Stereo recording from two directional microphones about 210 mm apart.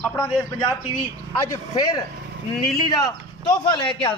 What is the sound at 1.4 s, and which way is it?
A man's voice, 15° left (ahead or behind).